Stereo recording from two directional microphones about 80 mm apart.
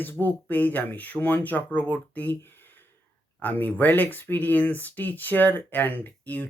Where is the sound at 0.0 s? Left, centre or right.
Left.